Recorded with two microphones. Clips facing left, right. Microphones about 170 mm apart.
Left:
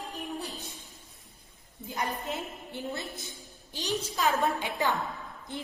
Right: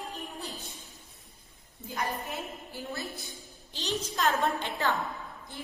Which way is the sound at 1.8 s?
20° left (ahead or behind).